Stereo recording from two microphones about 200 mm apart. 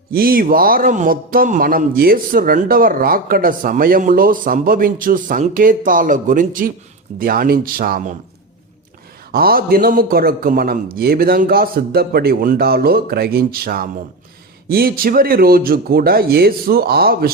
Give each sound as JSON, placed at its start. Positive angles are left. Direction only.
{"t": 0.1, "sound": "a man's voice", "side_deg": -45}
{"t": 9.3, "sound": "a man's voice", "side_deg": -50}